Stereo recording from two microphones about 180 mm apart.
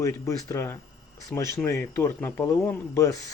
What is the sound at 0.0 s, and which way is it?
A man's voice, 15° left (ahead or behind).